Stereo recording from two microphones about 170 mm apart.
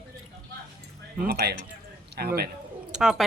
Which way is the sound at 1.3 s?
70° right (ahead or behind).